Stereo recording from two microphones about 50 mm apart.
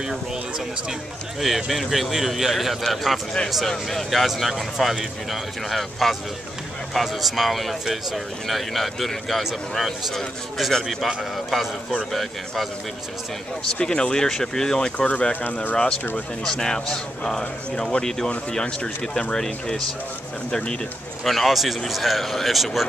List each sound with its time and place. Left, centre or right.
1.4 s speech: centre
13.7 s speech: centre
15.0 s speech: left
16.4 s speech: centre
19.3 s speech: centre
21.2 s speech: centre